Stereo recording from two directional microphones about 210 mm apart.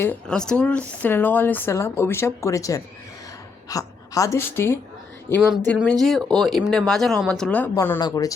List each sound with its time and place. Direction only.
0.0 s a woman's voice: 5° left (ahead or behind)
5.4 s speech: centre (ahead or behind)
7.8 s speech: 20° left (ahead or behind)